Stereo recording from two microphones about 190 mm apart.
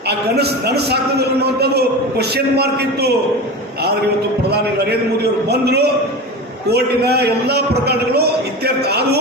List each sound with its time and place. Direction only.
0.1 s a man's voice: 60° right (ahead or behind)
4.4 s a man's voice: 60° right (ahead or behind)